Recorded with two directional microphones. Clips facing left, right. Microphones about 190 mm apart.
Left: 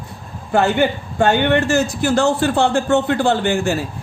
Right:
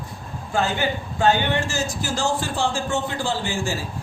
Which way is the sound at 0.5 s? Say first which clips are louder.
Left 7 dB; 60° left (ahead or behind).